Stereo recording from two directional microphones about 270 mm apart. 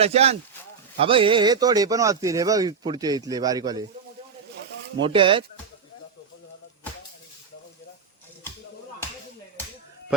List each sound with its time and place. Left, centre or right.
0.0 s speech: right
5.0 s speech: centre